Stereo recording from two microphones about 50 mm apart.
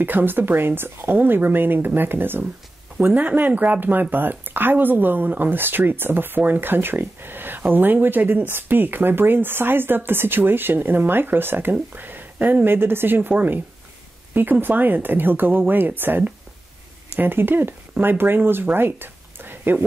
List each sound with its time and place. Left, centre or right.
0.0 s speech: right
3.2 s speech: right